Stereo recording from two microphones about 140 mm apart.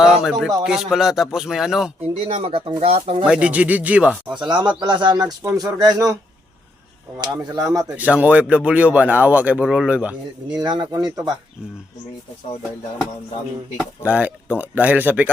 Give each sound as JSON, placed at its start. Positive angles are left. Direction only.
{"t": 0.0, "sound": "a man's voice", "side_deg": -5}
{"t": 2.2, "sound": "speech", "side_deg": -40}
{"t": 3.2, "sound": "speech", "side_deg": -10}
{"t": 4.4, "sound": "speech", "side_deg": -35}
{"t": 7.4, "sound": "speech", "side_deg": -25}
{"t": 7.9, "sound": "speech", "side_deg": -10}
{"t": 10.5, "sound": "speech", "side_deg": -30}
{"t": 14.0, "sound": "speech", "side_deg": -10}